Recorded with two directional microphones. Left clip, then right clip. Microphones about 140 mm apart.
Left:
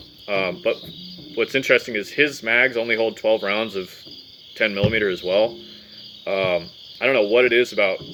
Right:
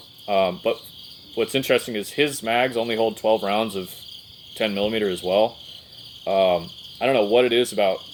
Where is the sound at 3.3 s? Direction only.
30° right (ahead or behind).